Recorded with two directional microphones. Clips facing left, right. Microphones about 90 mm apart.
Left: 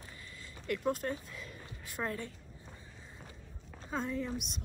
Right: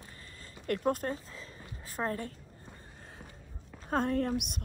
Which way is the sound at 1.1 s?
30° right (ahead or behind).